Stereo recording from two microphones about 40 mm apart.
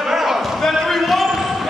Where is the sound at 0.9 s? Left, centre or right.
Centre.